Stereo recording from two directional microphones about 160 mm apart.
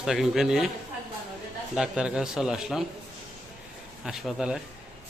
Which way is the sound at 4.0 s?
Centre (ahead or behind).